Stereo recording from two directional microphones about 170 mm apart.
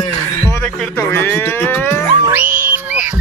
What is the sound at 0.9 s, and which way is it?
Speech, 15° left (ahead or behind).